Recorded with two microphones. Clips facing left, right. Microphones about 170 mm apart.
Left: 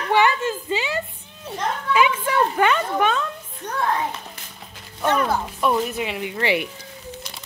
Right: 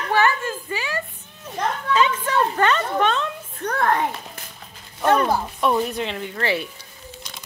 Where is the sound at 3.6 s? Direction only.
60° right (ahead or behind).